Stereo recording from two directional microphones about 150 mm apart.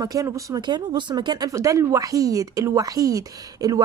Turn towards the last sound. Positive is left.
turn(degrees=-25)  # may be behind; listen again after turning